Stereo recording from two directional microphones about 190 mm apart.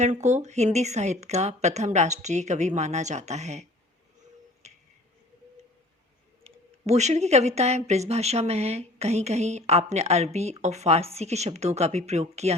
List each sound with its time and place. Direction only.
0.0 s speech: 35° right (ahead or behind)
4.6 s finger snapping: 35° right (ahead or behind)
6.4 s speech: 35° right (ahead or behind)